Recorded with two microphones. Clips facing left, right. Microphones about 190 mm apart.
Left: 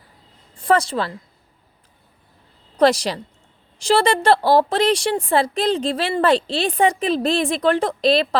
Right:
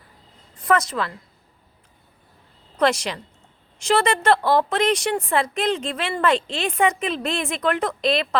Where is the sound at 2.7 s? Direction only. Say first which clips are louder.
Left 5 dB; 35° left (ahead or behind).